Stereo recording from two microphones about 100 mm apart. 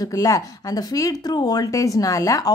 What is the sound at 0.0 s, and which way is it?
Speech, 35° left (ahead or behind).